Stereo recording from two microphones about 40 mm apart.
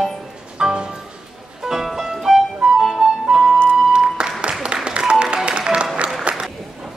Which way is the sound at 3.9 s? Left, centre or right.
Right.